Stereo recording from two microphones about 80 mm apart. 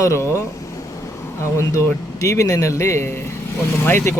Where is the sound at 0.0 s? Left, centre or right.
Left.